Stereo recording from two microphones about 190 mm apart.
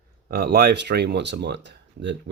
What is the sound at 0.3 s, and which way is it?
Speech, 55° right (ahead or behind).